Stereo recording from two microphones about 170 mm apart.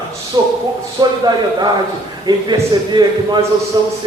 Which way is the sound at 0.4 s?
25° right (ahead or behind).